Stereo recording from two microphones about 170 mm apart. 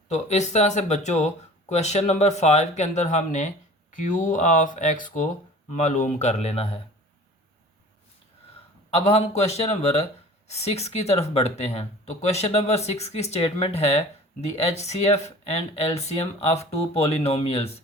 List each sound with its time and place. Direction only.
0.1 s speech: 40° left (ahead or behind)
8.9 s speech: 40° left (ahead or behind)